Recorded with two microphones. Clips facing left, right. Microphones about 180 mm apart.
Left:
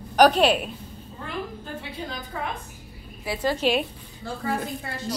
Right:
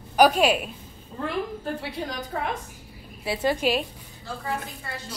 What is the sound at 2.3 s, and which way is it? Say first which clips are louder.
Speech: right 2 dB; 50° right (ahead or behind).